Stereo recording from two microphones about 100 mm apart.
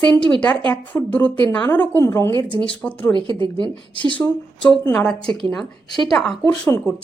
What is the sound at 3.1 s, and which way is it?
Speech, 50° right (ahead or behind).